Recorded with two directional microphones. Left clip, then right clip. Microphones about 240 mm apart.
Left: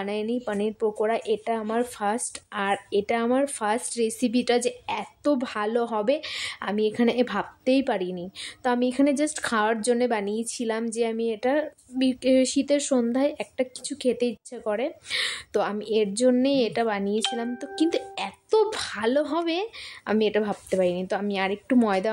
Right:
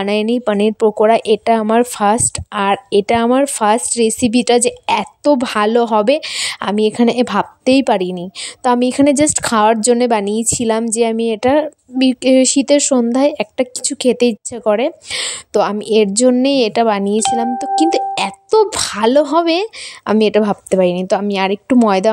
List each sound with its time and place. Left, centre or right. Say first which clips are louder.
0.0 s a woman's voice: right 13 dB; right